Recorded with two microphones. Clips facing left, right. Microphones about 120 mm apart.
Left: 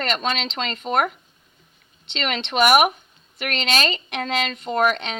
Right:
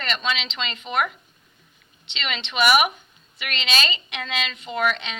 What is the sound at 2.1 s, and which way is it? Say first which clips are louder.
A woman's voice: left 4 dB; 50° left (ahead or behind).